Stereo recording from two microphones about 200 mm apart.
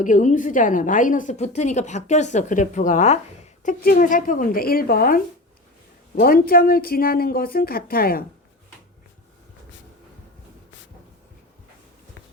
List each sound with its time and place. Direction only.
0.0 s a woman's voice: 40° left (ahead or behind)